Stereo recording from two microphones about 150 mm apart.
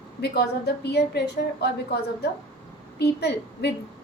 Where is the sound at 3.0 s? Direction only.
90° left.